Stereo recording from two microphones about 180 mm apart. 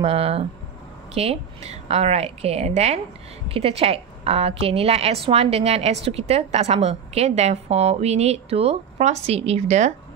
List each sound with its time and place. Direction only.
0.0 s a woman's voice: 30° right (ahead or behind)